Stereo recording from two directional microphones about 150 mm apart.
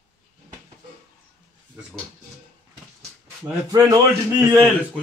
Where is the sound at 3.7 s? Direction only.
20° right (ahead or behind).